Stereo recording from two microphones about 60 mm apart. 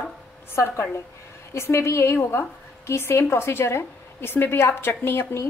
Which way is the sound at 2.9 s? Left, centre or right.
Left.